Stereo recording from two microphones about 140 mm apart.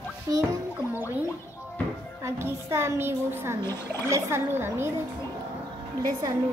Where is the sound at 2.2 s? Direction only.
20° right (ahead or behind).